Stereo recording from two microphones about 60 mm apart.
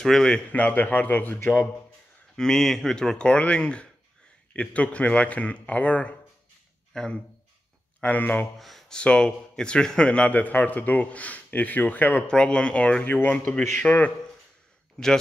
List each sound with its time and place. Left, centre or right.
0.0 s speech: centre
0.5 s a man's voice: left
2.3 s a man's voice: centre; by 6.1 s left
6.9 s speech: centre
8.0 s a man's voice: left
8.5 s speech: centre
8.9 s a man's voice: centre
12.3 s speech: centre
13.0 s a man's voice: left